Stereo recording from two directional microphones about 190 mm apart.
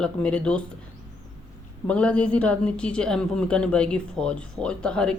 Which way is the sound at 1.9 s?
5° left (ahead or behind).